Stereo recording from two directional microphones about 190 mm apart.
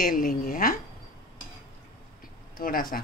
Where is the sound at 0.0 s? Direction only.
45° left (ahead or behind).